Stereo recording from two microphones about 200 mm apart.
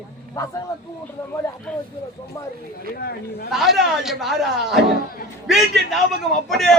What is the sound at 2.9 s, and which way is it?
Speech, 50° left (ahead or behind).